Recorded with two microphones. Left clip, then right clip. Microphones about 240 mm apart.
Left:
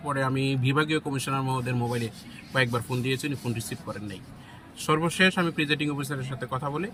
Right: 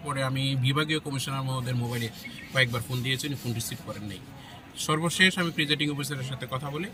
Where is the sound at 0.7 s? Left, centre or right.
Centre.